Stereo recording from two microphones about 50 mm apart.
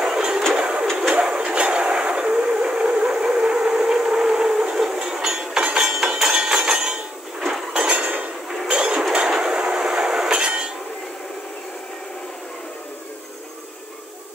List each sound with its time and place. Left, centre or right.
0.0 s music: centre
0.6 s a sound: centre
7.9 s cutlery: right
8.6 s dishes: centre
9.1 s a sound: centre
10.3 s hammer: centre